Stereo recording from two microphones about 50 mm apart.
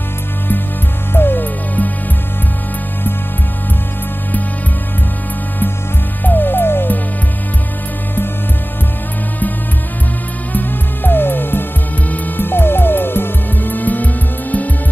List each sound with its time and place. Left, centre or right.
1.1 s music: left
6.2 s music: left
10.5 s music: left